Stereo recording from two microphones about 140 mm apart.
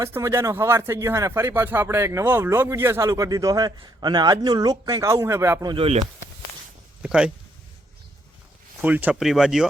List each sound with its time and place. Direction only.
0.0 s speech: 20° right (ahead or behind)
5.7 s speech: 40° right (ahead or behind)
7.0 s speech: 10° right (ahead or behind)
8.8 s speech: 10° right (ahead or behind)